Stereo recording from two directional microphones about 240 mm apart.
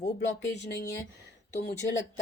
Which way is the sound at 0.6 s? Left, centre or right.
Left.